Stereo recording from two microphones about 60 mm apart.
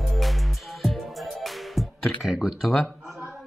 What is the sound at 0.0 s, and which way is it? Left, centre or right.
Music, centre.